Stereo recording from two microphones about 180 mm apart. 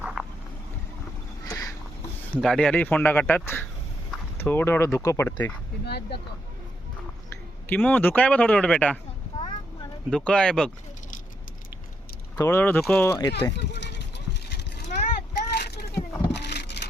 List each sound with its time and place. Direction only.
0.0 s vehicle: 5° right (ahead or behind)
1.5 s a sound: 20° left (ahead or behind)
2.3 s speech: 5° left (ahead or behind)
5.8 s speech: 65° left (ahead or behind)
7.7 s speech: 10° left (ahead or behind)
9.3 s a sound: 25° left (ahead or behind)
10.1 s speech: 5° left (ahead or behind)
12.4 s speech: 15° left (ahead or behind)
13.6 s a sound: 75° left (ahead or behind)
15.5 s vehicle: 65° left (ahead or behind)